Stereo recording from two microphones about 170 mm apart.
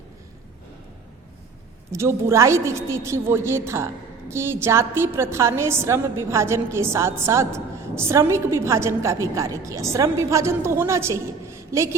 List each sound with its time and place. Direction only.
1.9 s a woman's voice: 15° right (ahead or behind)